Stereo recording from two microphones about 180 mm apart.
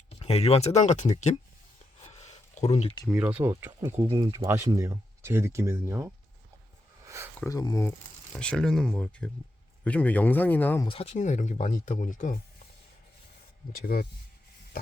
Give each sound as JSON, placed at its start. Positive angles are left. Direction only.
{"t": 0.1, "sound": "speech", "side_deg": 35}
{"t": 2.0, "sound": "a sound", "side_deg": 40}
{"t": 2.7, "sound": "speech", "side_deg": 30}
{"t": 3.1, "sound": "speech", "side_deg": -5}
{"t": 4.0, "sound": "speech", "side_deg": -30}
{"t": 4.3, "sound": "speech", "side_deg": -15}
{"t": 7.3, "sound": "speech", "side_deg": 20}
{"t": 8.3, "sound": "speech", "side_deg": 5}
{"t": 10.8, "sound": "speech", "side_deg": 35}
{"t": 13.7, "sound": "speech", "side_deg": 55}